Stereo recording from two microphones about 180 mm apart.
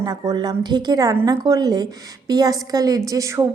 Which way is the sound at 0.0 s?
20° right (ahead or behind).